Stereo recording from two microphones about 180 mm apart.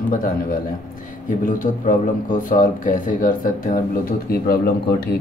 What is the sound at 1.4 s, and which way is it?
Speech, 50° left (ahead or behind).